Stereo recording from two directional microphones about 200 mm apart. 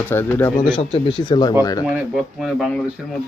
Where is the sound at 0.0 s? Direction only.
10° left (ahead or behind).